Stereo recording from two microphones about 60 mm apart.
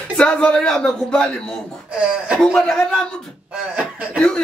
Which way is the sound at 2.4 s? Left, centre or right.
Centre.